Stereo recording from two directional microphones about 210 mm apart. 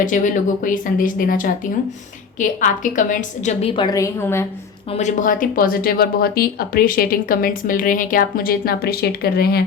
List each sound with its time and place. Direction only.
0.0 s speech: 40° left (ahead or behind)
3.9 s a woman's voice: 15° left (ahead or behind)
4.9 s speech: 35° left (ahead or behind)